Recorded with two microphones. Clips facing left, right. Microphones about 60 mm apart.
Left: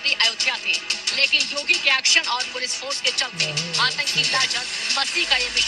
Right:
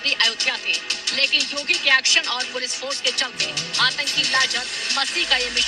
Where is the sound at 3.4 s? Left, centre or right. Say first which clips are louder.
Even; left.